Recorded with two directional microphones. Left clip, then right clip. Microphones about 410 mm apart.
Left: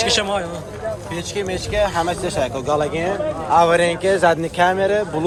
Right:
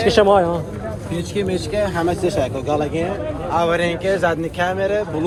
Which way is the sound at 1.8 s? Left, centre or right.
Centre.